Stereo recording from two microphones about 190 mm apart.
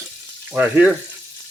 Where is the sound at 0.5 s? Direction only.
5° right (ahead or behind).